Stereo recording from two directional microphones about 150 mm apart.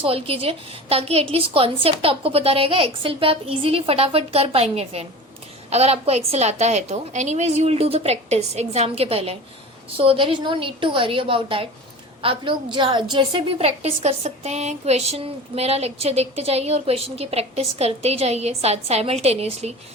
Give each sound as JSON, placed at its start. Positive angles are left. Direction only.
{"t": 0.0, "sound": "a woman's voice", "side_deg": -40}